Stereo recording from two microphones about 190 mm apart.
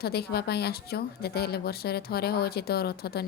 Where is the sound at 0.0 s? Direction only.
55° left (ahead or behind).